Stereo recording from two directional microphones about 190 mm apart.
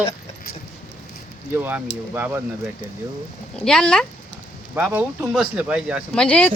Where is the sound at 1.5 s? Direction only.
10° right (ahead or behind).